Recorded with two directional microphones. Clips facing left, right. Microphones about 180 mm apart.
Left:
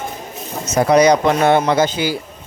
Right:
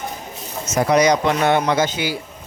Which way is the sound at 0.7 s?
35° left (ahead or behind).